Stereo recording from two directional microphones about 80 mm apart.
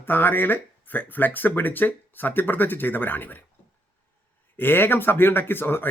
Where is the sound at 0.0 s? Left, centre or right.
Left.